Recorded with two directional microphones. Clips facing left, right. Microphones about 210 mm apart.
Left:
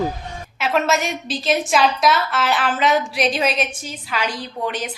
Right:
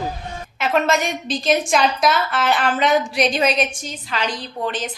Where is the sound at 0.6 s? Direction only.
5° left (ahead or behind).